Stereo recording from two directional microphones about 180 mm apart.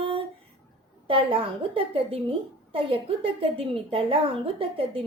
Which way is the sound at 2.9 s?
30° right (ahead or behind).